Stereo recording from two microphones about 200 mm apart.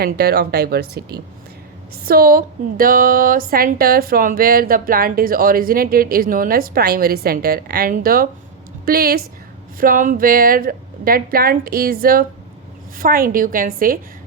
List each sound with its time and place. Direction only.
0.0 s a woman's voice: 50° right (ahead or behind)